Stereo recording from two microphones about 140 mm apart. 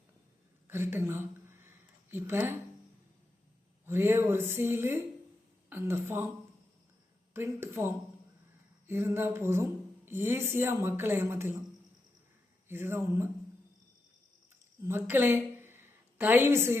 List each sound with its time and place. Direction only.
0.7 s a sound: 15° right (ahead or behind)
3.8 s speech: 15° right (ahead or behind)
7.3 s speech: 15° right (ahead or behind)
12.6 s speech: 15° right (ahead or behind)
14.8 s a woman's voice: 15° right (ahead or behind)